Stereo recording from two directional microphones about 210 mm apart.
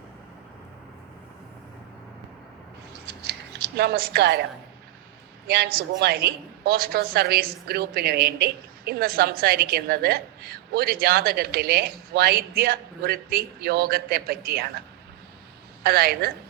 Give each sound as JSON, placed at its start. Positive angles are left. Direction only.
{"t": 3.1, "sound": "scissors", "side_deg": -55}
{"t": 5.5, "sound": "a woman's voice", "side_deg": -50}
{"t": 15.8, "sound": "a woman's voice", "side_deg": -50}